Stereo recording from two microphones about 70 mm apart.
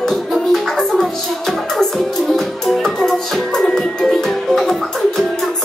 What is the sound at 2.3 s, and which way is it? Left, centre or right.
Music, centre.